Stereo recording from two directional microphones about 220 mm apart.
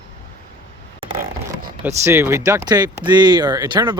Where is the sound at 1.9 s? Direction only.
10° right (ahead or behind).